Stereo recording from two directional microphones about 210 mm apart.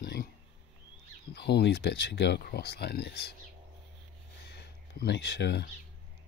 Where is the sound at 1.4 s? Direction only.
50° left (ahead or behind).